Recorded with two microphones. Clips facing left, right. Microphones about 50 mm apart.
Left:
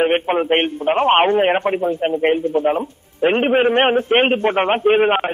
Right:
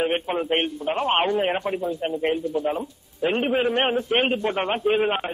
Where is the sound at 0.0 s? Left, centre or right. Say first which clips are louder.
Left 7 dB; left.